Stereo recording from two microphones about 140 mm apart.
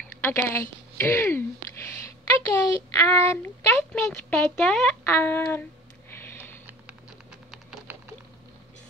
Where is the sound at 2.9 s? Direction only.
20° left (ahead or behind).